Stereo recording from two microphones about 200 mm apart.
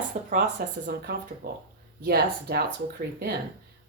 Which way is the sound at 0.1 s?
35° right (ahead or behind).